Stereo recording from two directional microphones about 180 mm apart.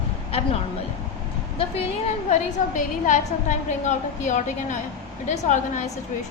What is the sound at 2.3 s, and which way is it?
A woman's voice, 40° left (ahead or behind).